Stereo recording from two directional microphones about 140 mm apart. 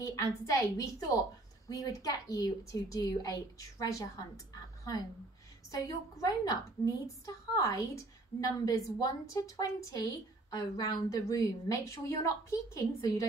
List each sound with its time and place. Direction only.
0.0 s a woman's voice: 25° left (ahead or behind)
5.7 s a woman's voice: 25° left (ahead or behind)